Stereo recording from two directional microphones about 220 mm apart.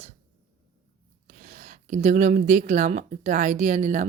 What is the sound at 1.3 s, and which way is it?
Speech, 35° right (ahead or behind).